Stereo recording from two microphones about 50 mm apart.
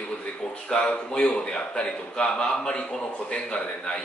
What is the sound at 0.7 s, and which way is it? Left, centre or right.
A man's voice, centre.